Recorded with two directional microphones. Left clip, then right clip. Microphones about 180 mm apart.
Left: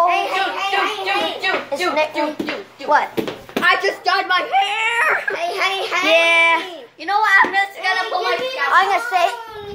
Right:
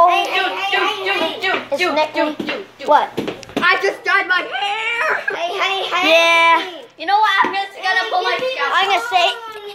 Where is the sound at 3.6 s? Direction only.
15° right (ahead or behind).